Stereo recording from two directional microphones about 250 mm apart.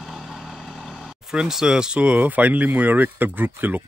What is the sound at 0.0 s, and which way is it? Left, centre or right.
Speech, centre.